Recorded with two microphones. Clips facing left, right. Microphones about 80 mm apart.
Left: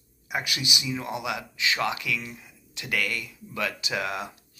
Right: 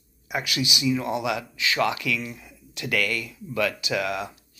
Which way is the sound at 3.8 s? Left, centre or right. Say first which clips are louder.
Right 3 dB; left.